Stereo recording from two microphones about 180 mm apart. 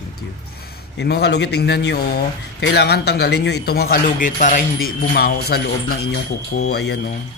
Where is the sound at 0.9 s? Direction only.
70° left (ahead or behind).